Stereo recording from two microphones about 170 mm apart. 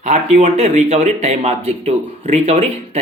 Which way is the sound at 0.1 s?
40° right (ahead or behind).